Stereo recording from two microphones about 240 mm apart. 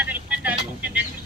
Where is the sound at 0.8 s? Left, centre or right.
Centre.